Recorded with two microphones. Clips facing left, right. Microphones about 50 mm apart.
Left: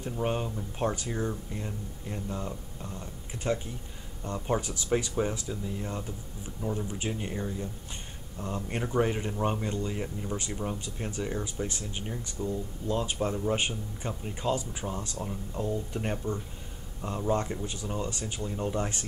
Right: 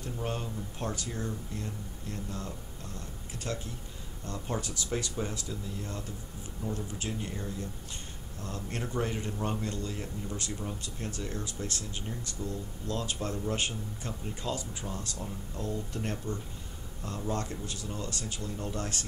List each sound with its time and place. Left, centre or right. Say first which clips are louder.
0.0 s speech: left 5 dB; left